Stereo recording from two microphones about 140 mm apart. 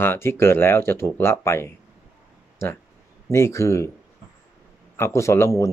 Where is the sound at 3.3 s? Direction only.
20° left (ahead or behind).